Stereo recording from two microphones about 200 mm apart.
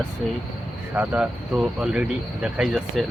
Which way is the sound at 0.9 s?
10° right (ahead or behind).